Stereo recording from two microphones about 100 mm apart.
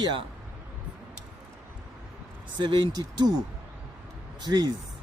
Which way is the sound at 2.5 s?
50° right (ahead or behind).